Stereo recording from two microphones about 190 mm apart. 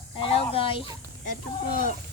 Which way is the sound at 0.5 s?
30° left (ahead or behind).